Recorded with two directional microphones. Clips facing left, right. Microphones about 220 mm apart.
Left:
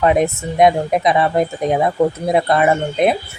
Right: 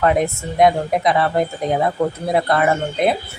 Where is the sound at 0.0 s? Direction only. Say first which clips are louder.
Left 2 dB; 20° left (ahead or behind).